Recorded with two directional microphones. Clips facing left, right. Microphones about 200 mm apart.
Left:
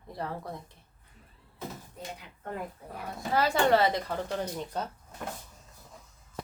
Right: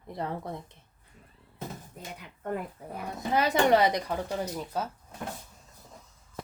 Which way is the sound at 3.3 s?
20° right (ahead or behind).